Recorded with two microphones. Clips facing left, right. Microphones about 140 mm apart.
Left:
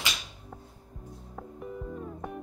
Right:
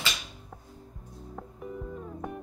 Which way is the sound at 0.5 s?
Centre (ahead or behind).